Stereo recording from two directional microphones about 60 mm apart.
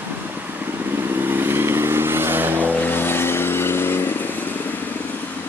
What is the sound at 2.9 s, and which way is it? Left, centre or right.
Vehicle, left.